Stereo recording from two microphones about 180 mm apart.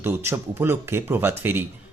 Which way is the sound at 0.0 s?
10° right (ahead or behind).